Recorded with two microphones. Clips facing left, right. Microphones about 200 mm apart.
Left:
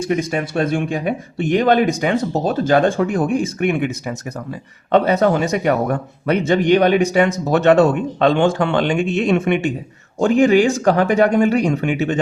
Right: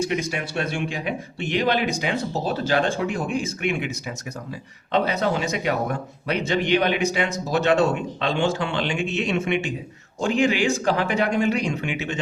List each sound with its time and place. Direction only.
0.1 s a man's voice: 45° left (ahead or behind)